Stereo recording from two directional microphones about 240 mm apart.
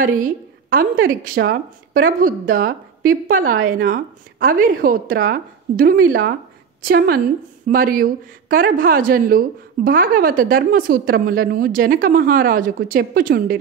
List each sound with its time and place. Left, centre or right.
0.0 s a woman's voice: right